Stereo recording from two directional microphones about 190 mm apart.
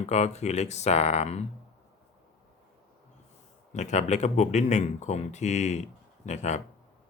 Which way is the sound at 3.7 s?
40° left (ahead or behind).